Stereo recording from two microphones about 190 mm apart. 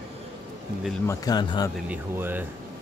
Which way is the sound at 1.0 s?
20° left (ahead or behind).